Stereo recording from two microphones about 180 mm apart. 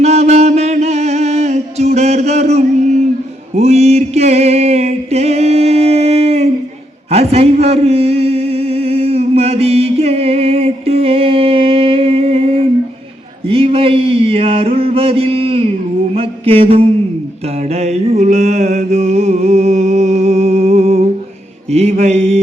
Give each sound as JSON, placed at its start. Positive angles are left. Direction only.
{"t": 0.0, "sound": "music", "side_deg": -35}
{"t": 3.5, "sound": "mantra", "side_deg": -35}
{"t": 7.1, "sound": "a sound", "side_deg": -35}
{"t": 16.1, "sound": "mantra", "side_deg": -30}